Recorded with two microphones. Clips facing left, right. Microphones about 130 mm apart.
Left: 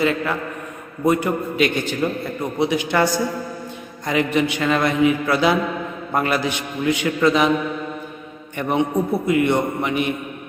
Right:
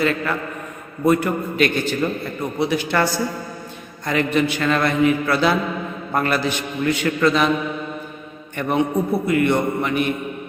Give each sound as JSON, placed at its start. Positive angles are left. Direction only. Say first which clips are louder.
{"t": 0.0, "sound": "a man's voice", "louder": "left 1 dB", "side_deg": 15}
{"t": 8.5, "sound": "a man's voice", "louder": "even", "side_deg": 20}